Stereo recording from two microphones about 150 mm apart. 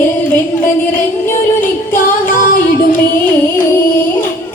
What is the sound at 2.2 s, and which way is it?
Music, 60° left (ahead or behind).